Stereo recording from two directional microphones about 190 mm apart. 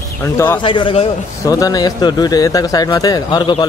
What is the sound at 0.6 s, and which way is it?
Speech, 25° left (ahead or behind).